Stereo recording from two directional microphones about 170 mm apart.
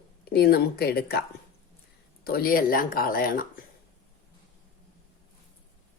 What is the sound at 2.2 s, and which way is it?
A woman's voice, 60° left (ahead or behind).